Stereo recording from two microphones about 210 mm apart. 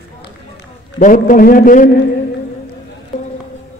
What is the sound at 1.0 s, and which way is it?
Speech, 40° left (ahead or behind).